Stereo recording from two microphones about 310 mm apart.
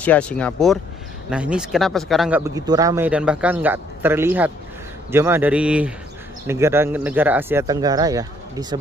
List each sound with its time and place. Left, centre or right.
0.0 s speech: centre